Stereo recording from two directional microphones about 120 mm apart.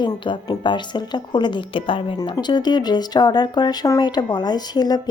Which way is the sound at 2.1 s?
35° left (ahead or behind).